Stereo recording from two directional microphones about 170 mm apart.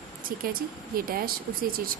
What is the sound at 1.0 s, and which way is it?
A woman's voice, 60° right (ahead or behind).